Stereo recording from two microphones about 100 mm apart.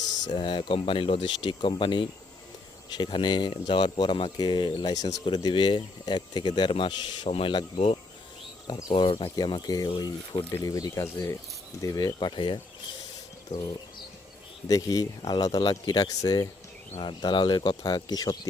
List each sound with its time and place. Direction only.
0.3 s speech: 55° left (ahead or behind)
7.3 s speech: 80° left
8.6 s speech: 55° left (ahead or behind)
9.3 s speech: 45° left (ahead or behind)
13.5 s speech: 40° left (ahead or behind)
14.7 s speech: 40° left (ahead or behind)
17.0 s speech: 50° left (ahead or behind)